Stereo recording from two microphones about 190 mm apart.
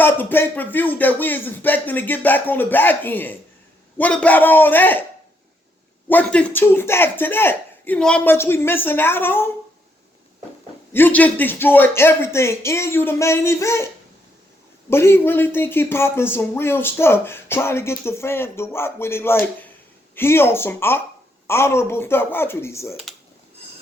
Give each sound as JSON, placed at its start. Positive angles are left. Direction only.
{"t": 0.0, "sound": "speech", "side_deg": 10}
{"t": 6.1, "sound": "speech", "side_deg": 5}
{"t": 10.9, "sound": "speech", "side_deg": 10}